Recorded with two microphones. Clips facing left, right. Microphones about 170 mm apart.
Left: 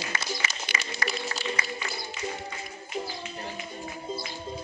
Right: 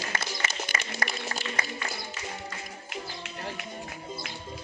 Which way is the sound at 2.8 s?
70° right (ahead or behind).